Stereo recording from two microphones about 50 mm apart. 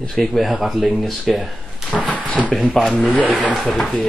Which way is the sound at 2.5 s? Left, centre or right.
Centre.